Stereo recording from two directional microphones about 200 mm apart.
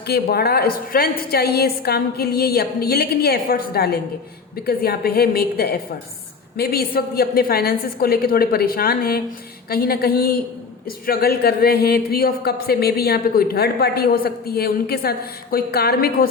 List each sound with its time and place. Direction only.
0.1 s speech: 50° left (ahead or behind)